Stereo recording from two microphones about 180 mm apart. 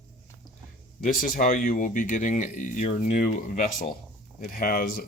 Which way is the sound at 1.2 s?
45° left (ahead or behind).